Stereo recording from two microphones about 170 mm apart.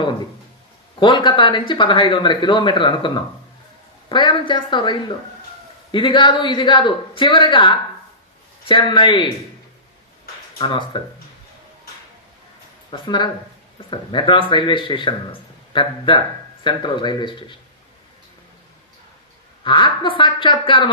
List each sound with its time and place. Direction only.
0.9 s speech: 30° left (ahead or behind)
10.6 s speech: 30° left (ahead or behind)
12.9 s speech: 25° left (ahead or behind)
19.6 s speech: 30° left (ahead or behind)